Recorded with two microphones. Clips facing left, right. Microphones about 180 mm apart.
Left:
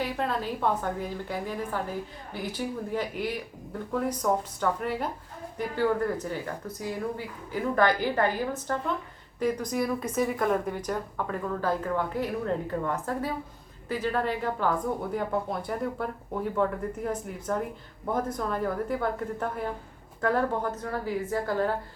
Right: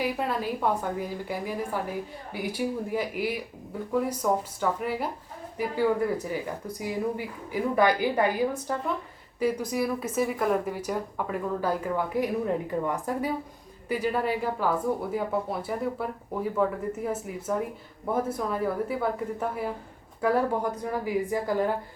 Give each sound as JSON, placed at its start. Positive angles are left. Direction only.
{"t": 0.0, "sound": "speech", "side_deg": -10}